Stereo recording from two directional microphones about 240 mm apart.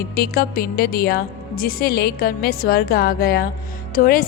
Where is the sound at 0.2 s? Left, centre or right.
Left.